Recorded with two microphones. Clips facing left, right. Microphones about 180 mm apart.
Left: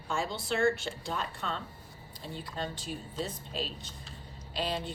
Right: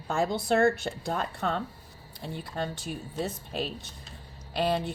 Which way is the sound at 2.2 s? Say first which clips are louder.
Right 4 dB; 60° right (ahead or behind).